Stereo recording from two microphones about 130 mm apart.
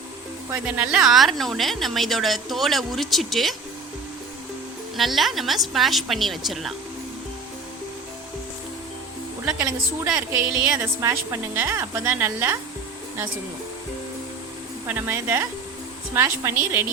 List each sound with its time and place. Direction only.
0.6 s a woman's voice: 5° right (ahead or behind)
4.9 s a woman's voice: centre (ahead or behind)
9.6 s a woman's voice: 25° right (ahead or behind)
14.8 s a woman's voice: 15° right (ahead or behind)